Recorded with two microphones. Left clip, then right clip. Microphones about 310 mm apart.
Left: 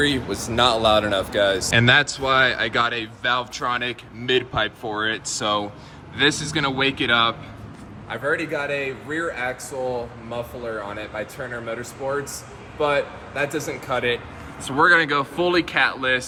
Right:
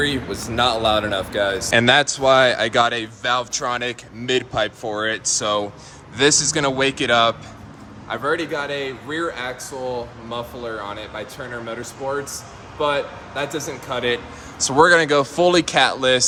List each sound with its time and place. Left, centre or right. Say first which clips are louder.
0.0 s speech: even; centre
8.1 s speech: right 2 dB; centre
8.5 s speech: even; centre